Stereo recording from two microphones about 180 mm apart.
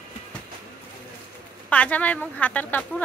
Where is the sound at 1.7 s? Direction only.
10° left (ahead or behind).